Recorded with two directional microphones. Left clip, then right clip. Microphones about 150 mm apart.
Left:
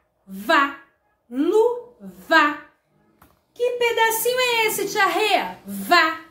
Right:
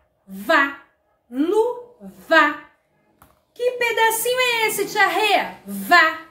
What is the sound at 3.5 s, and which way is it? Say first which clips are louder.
A woman's voice: even; 10° left (ahead or behind).